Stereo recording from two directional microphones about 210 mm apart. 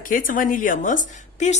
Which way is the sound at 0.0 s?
40° left (ahead or behind).